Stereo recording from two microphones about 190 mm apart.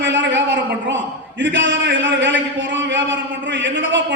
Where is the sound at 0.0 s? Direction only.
70° right (ahead or behind).